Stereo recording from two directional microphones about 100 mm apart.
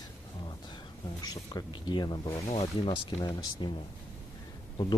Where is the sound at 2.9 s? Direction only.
65° left (ahead or behind).